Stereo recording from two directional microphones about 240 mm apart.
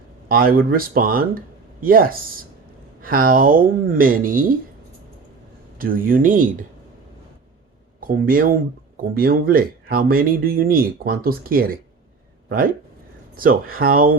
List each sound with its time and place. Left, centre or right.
0.3 s speech: right
5.7 s speech: right
8.0 s speech: right
13.3 s speech: right